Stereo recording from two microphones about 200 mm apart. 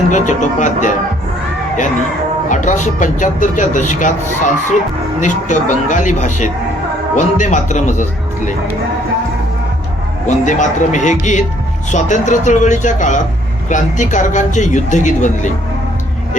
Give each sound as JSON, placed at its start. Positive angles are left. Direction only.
{"t": 0.1, "sound": "speech", "side_deg": 40}
{"t": 2.5, "sound": "speech", "side_deg": 40}
{"t": 10.2, "sound": "speech", "side_deg": 40}